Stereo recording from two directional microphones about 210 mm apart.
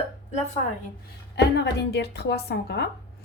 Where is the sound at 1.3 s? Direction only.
55° left (ahead or behind).